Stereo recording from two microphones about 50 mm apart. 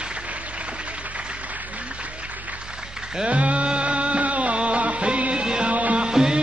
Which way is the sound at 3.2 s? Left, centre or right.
Right.